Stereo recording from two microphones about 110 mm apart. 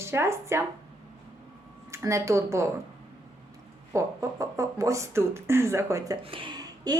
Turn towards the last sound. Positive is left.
turn(degrees=-35)  # may be behind; listen again after turning